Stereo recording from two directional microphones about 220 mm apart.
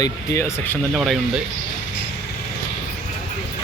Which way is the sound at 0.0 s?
10° left (ahead or behind).